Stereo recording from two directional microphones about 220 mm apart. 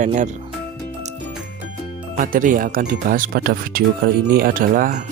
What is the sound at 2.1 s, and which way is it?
Speech, 40° right (ahead or behind).